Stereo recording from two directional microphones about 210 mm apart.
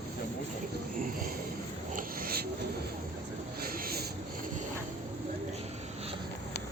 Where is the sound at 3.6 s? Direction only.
45° right (ahead or behind).